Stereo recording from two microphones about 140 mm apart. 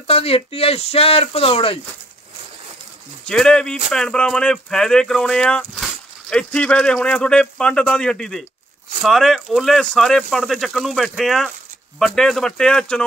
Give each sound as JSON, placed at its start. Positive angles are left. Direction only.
{"t": 0.0, "sound": "speech", "side_deg": 45}
{"t": 3.3, "sound": "speech", "side_deg": 5}